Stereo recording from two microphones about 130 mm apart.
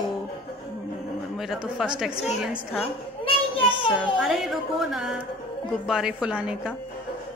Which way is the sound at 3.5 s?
40° left (ahead or behind).